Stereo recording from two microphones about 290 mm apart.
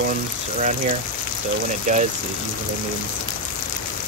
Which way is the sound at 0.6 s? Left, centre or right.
Right.